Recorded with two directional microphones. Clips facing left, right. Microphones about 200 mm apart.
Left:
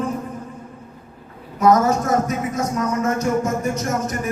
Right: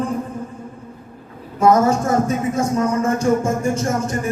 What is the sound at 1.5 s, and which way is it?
Speech, 30° right (ahead or behind).